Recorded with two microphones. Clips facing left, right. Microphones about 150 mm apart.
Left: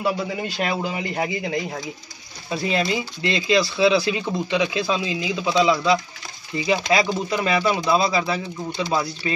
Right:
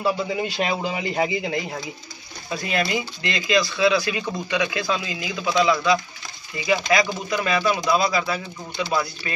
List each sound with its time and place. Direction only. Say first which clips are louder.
0.4 s speech: right 1 dB; 5° right (ahead or behind)
2.5 s speech: left 2 dB; 25° left (ahead or behind)